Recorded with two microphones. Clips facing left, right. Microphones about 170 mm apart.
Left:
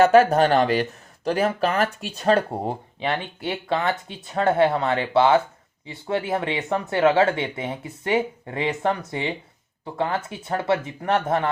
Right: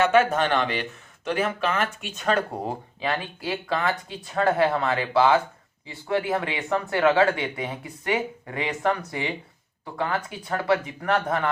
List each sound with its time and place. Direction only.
0.0 s speech: 40° left (ahead or behind)